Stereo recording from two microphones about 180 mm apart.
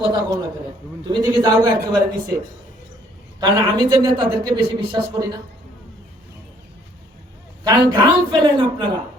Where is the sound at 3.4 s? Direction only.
25° right (ahead or behind).